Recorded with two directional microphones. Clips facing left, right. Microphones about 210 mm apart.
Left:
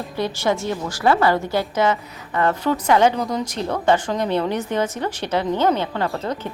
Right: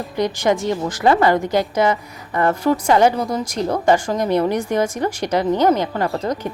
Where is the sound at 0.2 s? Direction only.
15° right (ahead or behind).